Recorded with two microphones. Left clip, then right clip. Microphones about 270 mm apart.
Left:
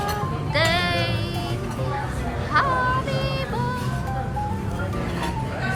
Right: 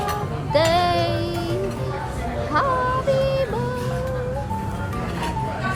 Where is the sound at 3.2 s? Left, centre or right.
Centre.